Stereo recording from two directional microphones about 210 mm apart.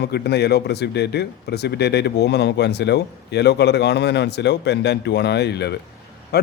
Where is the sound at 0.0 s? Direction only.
50° left (ahead or behind).